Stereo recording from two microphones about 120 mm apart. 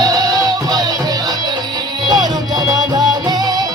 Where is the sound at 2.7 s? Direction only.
35° right (ahead or behind).